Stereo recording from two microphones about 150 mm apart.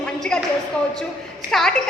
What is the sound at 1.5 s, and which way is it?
Speech, centre (ahead or behind).